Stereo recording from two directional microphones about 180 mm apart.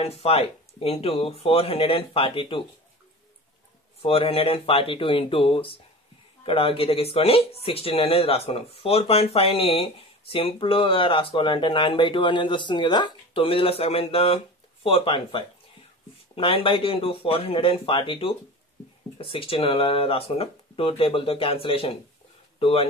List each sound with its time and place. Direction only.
0.0 s speech: 35° left (ahead or behind)
4.0 s speech: 30° left (ahead or behind)